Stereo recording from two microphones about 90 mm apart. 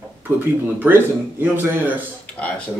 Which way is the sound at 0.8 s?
20° right (ahead or behind).